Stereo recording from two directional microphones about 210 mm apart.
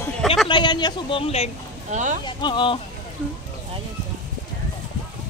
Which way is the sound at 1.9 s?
35° right (ahead or behind).